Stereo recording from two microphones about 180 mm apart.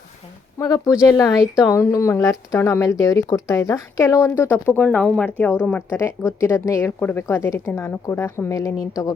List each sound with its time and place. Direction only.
0.6 s speech: 20° left (ahead or behind)